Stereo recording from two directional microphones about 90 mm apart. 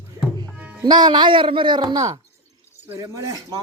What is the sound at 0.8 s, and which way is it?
Speech, 55° right (ahead or behind).